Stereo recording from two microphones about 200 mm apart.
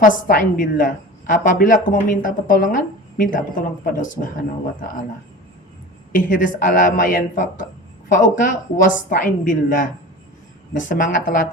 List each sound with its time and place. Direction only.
0.0 s a woman's voice: 40° left (ahead or behind)
6.1 s a woman's voice: 40° left (ahead or behind)